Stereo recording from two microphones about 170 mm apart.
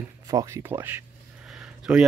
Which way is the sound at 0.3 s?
20° right (ahead or behind).